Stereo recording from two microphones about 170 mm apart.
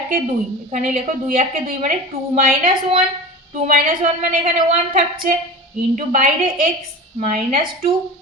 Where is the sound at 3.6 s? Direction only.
50° right (ahead or behind).